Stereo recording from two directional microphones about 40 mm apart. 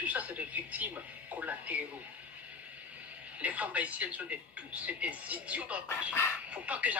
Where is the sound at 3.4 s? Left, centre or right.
Right.